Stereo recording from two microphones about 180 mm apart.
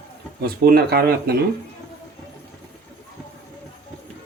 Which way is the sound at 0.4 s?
60° right (ahead or behind).